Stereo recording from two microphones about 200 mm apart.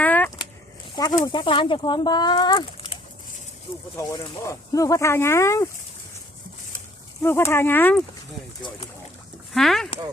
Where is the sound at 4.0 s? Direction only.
15° left (ahead or behind).